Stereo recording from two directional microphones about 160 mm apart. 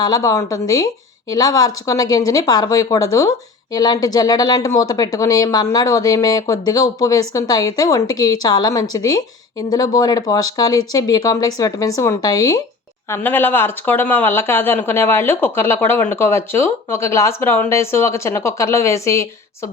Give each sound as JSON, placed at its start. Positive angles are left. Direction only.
{"t": 0.0, "sound": "speech", "side_deg": 20}